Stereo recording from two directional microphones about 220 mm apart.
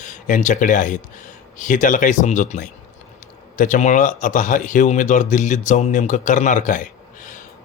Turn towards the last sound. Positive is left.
turn(degrees=35)  # may be behind; listen again after turning